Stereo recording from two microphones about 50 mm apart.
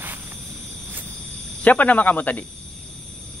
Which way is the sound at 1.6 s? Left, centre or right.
Left.